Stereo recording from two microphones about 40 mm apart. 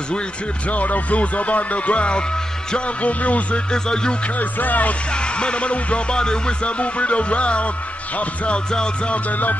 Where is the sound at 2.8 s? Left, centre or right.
Left.